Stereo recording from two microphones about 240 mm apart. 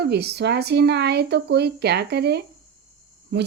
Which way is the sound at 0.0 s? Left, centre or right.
Right.